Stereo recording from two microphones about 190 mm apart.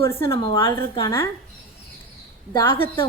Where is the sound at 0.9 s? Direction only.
15° left (ahead or behind).